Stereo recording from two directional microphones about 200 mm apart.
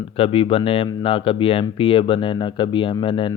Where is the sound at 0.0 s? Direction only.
25° left (ahead or behind).